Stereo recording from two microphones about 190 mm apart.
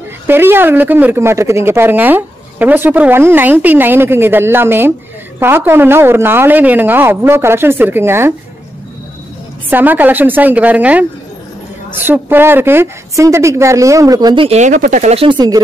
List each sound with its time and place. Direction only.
0.3 s speech: 10° right (ahead or behind)
9.7 s speech: 10° right (ahead or behind)
12.1 s speech: 10° right (ahead or behind); by 14.6 s 25° right (ahead or behind)
14.6 s speech: 40° right (ahead or behind); by 15.6 s 20° right (ahead or behind)